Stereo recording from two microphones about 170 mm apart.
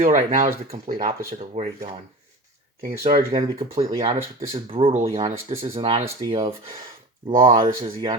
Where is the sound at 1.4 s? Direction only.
40° right (ahead or behind).